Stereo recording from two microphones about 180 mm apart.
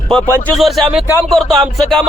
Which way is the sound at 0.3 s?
10° left (ahead or behind).